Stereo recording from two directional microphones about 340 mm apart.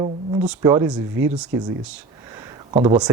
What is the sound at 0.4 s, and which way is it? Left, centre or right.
Speech, centre.